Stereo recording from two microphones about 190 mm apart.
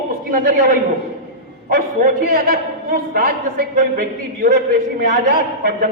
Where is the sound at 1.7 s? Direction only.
55° right (ahead or behind).